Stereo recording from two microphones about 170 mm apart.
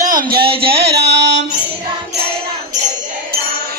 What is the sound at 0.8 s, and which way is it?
Music, 80° right.